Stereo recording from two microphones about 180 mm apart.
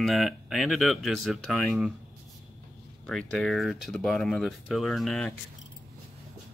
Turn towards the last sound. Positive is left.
turn(degrees=0)  # may be behind; listen again after turning